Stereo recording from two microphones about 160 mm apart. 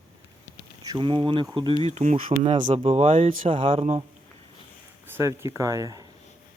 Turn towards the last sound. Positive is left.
turn(degrees=-25)  # may be behind; listen again after turning